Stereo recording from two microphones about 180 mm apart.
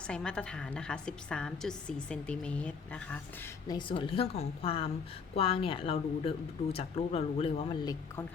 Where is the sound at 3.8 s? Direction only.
30° left (ahead or behind).